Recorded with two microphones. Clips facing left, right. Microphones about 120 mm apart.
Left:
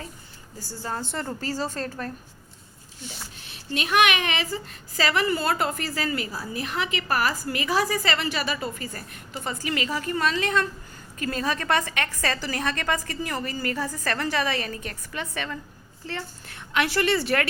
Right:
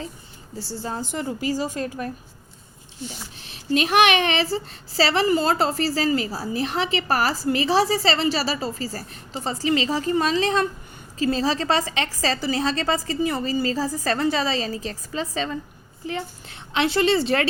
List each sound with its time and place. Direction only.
0.8 s a woman's voice: 20° right (ahead or behind)
3.8 s a woman's voice: 35° right (ahead or behind)